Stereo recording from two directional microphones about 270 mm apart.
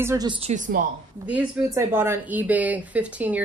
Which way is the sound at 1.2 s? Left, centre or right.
Centre.